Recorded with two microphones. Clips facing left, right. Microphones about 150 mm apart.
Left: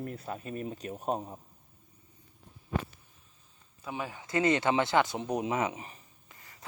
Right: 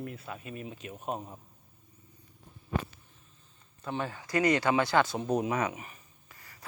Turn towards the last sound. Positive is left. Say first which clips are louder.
# even
turn(degrees=20)  # may be behind; listen again after turning